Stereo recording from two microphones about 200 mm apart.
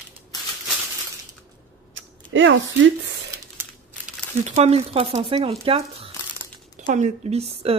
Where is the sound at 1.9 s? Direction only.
70° right (ahead or behind).